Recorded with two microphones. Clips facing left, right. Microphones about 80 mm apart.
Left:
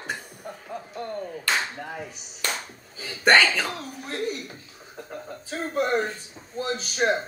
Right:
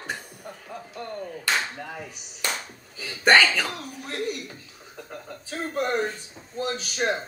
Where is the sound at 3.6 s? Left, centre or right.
Left.